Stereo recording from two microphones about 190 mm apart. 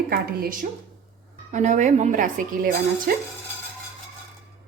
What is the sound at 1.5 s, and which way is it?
Speech, 40° right (ahead or behind).